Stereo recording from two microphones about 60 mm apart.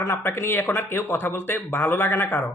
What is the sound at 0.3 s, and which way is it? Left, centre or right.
Speech, left.